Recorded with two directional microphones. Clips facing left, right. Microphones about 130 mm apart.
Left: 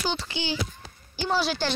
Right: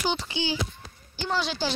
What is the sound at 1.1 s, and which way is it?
Speech, 10° left (ahead or behind).